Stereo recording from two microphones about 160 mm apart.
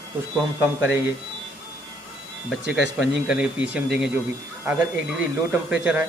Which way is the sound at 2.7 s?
5° right (ahead or behind).